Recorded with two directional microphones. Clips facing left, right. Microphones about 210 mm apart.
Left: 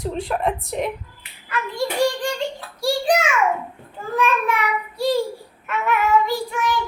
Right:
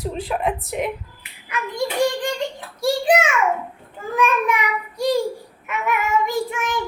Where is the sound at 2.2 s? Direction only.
20° right (ahead or behind).